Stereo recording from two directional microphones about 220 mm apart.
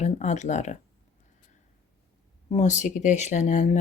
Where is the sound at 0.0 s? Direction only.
30° left (ahead or behind).